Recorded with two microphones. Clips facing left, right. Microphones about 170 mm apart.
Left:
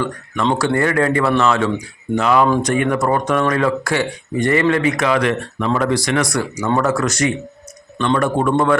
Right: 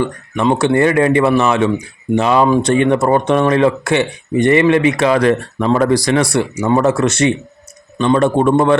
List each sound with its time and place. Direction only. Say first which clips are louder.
0.0 s speech: right 4 dB; 20° right (ahead or behind)